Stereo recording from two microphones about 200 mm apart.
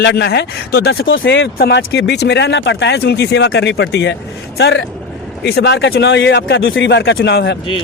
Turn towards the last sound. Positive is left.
turn(degrees=60)  # may be behind; listen again after turning